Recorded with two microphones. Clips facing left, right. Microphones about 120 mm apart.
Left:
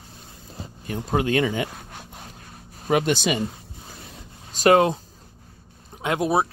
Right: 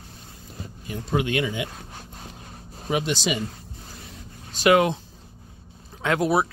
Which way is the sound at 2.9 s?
55° left (ahead or behind).